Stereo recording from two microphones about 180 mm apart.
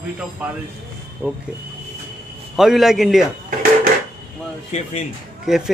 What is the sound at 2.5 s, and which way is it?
Speech, centre (ahead or behind).